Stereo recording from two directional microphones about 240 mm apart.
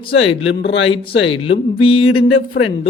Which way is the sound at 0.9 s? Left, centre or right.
Left.